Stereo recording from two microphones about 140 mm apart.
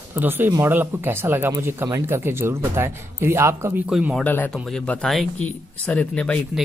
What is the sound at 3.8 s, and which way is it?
Speech, 10° right (ahead or behind).